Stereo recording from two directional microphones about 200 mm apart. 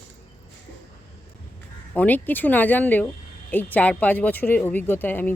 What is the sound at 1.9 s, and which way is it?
Speech, 10° left (ahead or behind).